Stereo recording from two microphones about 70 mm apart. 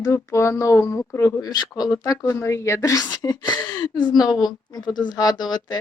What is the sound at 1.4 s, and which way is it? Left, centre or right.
Speech, left.